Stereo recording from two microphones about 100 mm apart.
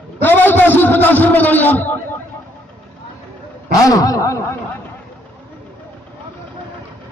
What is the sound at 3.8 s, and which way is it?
Speech, 35° left (ahead or behind).